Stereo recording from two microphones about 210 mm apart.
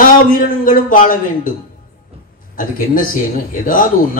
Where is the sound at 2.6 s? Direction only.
40° left (ahead or behind).